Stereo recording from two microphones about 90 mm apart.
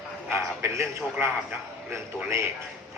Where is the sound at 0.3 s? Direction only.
30° right (ahead or behind).